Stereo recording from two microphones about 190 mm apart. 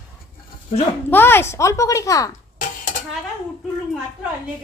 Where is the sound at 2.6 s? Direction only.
45° left (ahead or behind).